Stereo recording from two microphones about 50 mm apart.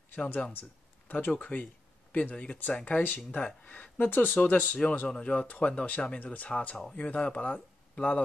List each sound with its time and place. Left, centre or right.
0.1 s speech: left
2.8 s speech: left